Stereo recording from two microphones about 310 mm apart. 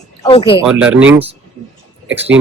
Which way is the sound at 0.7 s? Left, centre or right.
Centre.